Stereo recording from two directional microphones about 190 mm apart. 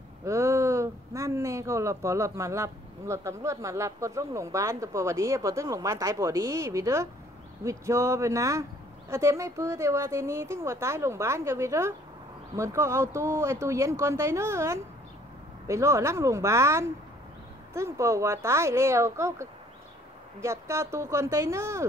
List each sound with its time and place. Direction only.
0.2 s speech: 15° right (ahead or behind)